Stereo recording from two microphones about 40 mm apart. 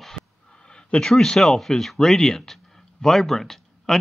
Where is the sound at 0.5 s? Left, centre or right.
Left.